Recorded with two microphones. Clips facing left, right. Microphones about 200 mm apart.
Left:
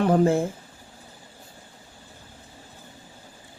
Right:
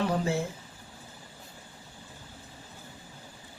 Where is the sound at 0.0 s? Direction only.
55° left (ahead or behind).